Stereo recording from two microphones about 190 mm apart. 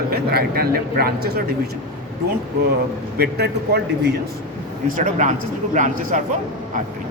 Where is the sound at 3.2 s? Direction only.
55° right (ahead or behind).